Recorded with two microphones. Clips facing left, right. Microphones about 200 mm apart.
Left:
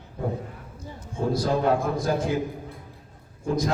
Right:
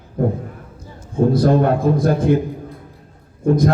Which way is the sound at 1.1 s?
60° right (ahead or behind).